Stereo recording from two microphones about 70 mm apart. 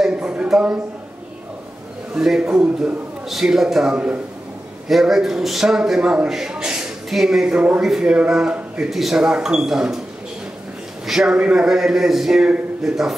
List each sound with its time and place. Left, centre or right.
0.0 s a sound: centre
0.5 s a man's voice: centre
2.1 s a man's voice: centre
4.8 s a man's voice: centre
11.1 s a man's voice: centre